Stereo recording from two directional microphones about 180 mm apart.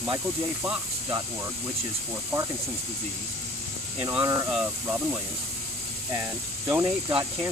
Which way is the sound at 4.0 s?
10° right (ahead or behind).